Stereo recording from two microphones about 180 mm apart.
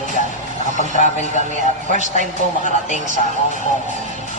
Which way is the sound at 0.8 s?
40° left (ahead or behind).